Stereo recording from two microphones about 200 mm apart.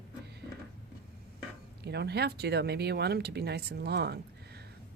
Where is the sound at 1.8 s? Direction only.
55° right (ahead or behind).